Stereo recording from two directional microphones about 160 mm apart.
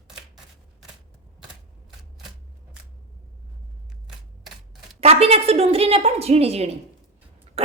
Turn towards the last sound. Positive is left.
turn(degrees=-40)  # may be behind; listen again after turning